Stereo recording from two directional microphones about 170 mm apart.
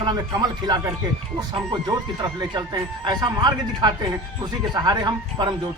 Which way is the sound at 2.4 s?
25° right (ahead or behind).